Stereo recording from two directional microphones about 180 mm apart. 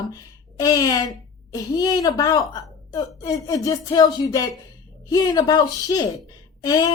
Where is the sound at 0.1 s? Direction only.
20° left (ahead or behind).